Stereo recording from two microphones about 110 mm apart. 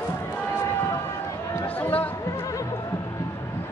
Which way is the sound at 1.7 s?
15° left (ahead or behind).